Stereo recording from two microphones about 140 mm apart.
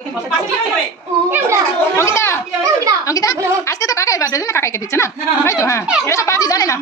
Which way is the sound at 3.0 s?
25° left (ahead or behind).